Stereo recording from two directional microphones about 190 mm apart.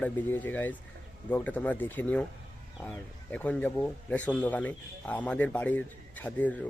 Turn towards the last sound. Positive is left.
turn(degrees=10)  # may be behind; listen again after turning